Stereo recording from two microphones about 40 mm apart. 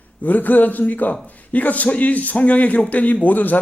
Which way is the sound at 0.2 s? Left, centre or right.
Left.